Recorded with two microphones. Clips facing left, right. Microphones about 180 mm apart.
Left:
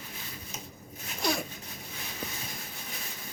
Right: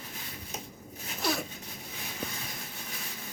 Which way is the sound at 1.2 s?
Centre (ahead or behind).